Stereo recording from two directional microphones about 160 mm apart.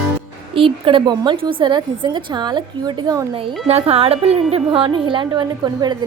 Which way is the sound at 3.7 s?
40° right (ahead or behind).